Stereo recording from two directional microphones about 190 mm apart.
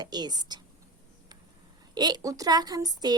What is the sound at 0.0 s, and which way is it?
Speech, 20° right (ahead or behind).